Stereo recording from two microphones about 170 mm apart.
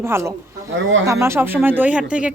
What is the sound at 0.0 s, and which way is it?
Speech, 15° right (ahead or behind).